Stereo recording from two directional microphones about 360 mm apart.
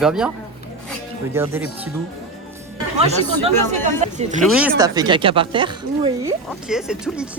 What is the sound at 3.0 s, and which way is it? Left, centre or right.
Speech, centre.